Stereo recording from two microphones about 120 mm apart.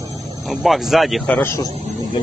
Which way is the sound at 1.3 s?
15° left (ahead or behind).